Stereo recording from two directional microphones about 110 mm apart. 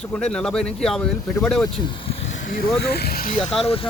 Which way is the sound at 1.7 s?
55° left (ahead or behind).